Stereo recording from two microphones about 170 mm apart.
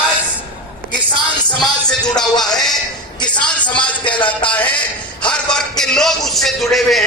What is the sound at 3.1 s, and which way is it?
Speech, 25° left (ahead or behind).